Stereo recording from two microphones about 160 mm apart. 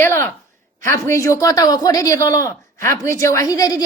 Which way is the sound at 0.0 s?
15° left (ahead or behind).